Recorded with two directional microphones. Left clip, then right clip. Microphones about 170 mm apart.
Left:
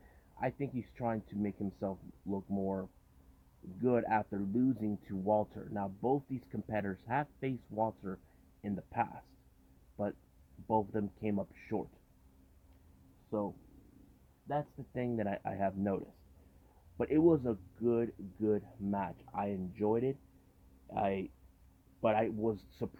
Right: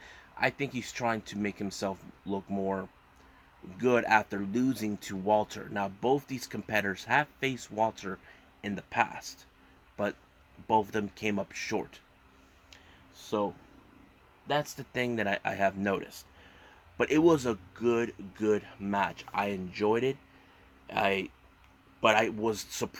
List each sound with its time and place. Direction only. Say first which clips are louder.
0.3 s speech: right 7 dB; 5° right (ahead or behind)
1.9 s speech: right 5 dB; 35° right (ahead or behind)
3.8 s speech: right 7 dB; 5° right (ahead or behind)
10.7 s speech: right 6 dB; 5° right (ahead or behind)
13.3 s speech: right 7 dB; 20° right (ahead or behind)
14.9 s speech: right 7 dB; 5° right (ahead or behind)